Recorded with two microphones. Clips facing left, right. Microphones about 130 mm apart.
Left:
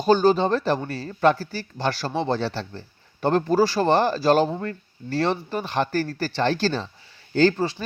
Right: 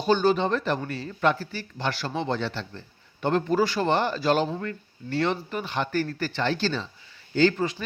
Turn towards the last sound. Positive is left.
turn(degrees=35)  # may be behind; listen again after turning